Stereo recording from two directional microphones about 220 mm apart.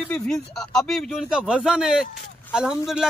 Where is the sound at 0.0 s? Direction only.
5° left (ahead or behind).